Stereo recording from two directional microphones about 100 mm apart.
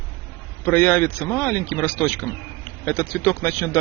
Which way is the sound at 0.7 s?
20° left (ahead or behind).